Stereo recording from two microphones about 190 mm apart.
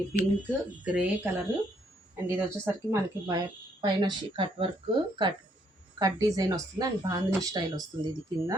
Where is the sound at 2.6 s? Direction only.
15° right (ahead or behind).